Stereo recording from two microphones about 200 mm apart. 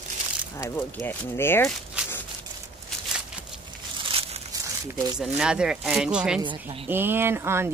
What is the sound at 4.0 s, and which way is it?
Crumpling, 30° right (ahead or behind).